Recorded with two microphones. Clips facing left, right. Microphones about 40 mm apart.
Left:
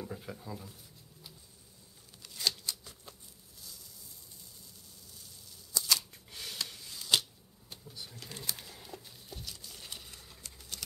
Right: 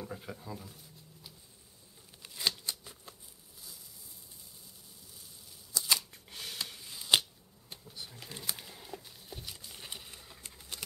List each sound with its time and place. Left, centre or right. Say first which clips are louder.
0.0 s speech: even; centre
2.2 s scissors: even; centre
2.6 s shuffling cards: even; right
5.8 s scissors: even; centre
7.8 s a sound: even; centre